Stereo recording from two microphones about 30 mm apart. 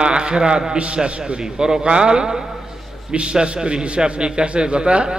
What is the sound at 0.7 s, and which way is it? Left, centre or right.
Speech, right.